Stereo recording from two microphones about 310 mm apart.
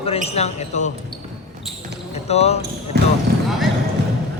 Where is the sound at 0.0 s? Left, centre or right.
Centre.